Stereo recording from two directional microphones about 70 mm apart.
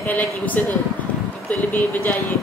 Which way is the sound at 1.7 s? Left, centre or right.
Left.